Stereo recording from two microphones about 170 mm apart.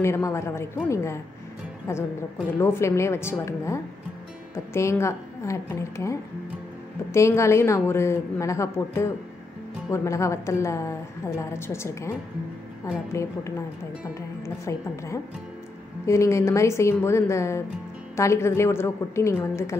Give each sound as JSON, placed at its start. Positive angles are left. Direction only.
{"t": 0.0, "sound": "a woman's voice", "side_deg": 15}
{"t": 13.1, "sound": "a woman's voice", "side_deg": 15}